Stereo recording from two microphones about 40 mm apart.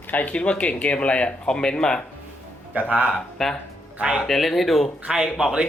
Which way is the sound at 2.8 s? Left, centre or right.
Right.